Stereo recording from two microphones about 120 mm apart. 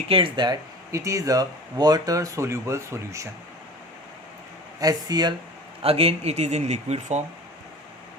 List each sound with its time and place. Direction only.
0.1 s speech: 45° right (ahead or behind); by 3.2 s 25° right (ahead or behind)
4.8 s speech: 30° right (ahead or behind)
5.8 s speech: 55° right (ahead or behind)